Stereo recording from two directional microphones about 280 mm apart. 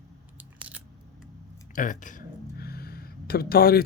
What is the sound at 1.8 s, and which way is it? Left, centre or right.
Speech, left.